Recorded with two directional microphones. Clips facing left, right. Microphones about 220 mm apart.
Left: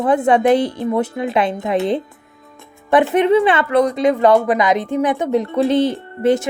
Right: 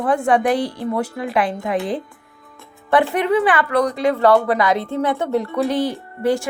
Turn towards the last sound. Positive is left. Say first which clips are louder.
# left 4 dB
turn(degrees=20)  # may be behind; listen again after turning